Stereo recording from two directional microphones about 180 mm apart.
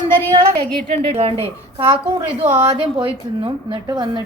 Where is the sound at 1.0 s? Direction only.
30° right (ahead or behind).